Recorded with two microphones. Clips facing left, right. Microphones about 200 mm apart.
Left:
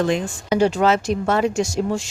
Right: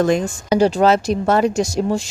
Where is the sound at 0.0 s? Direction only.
40° right (ahead or behind).